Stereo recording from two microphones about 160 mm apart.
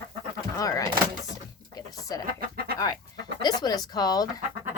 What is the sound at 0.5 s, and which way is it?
Speech, 20° left (ahead or behind).